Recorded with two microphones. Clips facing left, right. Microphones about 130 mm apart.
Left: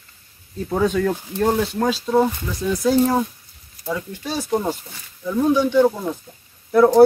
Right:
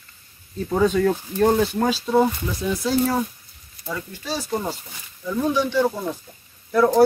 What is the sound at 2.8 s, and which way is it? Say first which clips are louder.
Speech: left 5 dB; 15° left (ahead or behind).